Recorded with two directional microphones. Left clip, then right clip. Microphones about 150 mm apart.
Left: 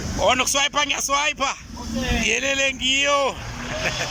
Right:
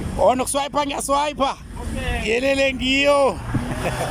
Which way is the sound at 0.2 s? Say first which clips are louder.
Right 1 dB; 35° right (ahead or behind).